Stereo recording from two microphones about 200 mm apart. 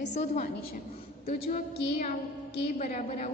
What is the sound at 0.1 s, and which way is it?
A woman's voice, 40° left (ahead or behind).